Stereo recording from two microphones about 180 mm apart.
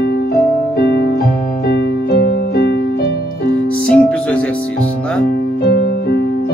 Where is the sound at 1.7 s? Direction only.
65° left (ahead or behind).